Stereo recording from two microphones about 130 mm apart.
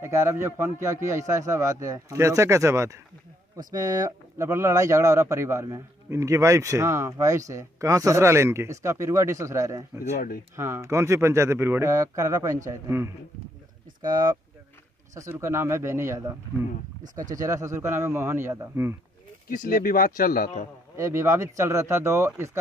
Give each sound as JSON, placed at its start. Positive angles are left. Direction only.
{"t": 0.0, "sound": "speech", "side_deg": -20}
{"t": 15.1, "sound": "speech", "side_deg": -20}
{"t": 19.6, "sound": "a man's voice", "side_deg": 90}
{"t": 20.9, "sound": "speech", "side_deg": -20}